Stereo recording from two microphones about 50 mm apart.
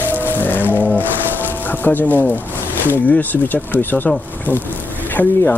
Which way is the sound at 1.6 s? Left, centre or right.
Left.